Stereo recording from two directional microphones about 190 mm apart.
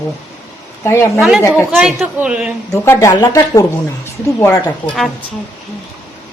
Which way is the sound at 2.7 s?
15° left (ahead or behind).